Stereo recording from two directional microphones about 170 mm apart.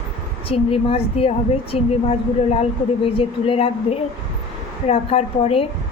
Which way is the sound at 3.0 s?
35° left (ahead or behind).